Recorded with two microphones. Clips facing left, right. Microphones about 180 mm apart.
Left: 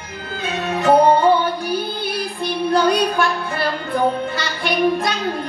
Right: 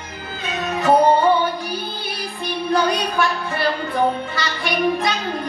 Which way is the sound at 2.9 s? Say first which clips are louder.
Left 3 dB; 55° left (ahead or behind).